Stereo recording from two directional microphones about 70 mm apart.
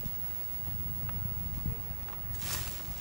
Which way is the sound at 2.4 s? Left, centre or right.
Centre.